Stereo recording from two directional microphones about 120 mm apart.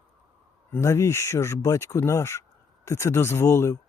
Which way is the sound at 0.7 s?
20° left (ahead or behind).